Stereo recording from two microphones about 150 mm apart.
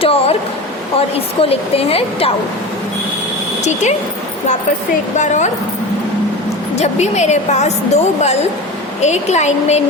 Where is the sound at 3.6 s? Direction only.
50° left (ahead or behind).